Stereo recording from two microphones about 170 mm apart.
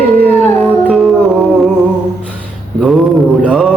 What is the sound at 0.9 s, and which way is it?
Music, 5° right (ahead or behind).